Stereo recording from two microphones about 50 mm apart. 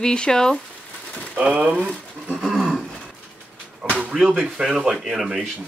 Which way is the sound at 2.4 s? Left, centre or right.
Centre.